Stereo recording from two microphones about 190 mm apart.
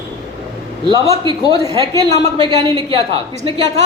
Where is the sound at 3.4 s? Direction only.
30° right (ahead or behind).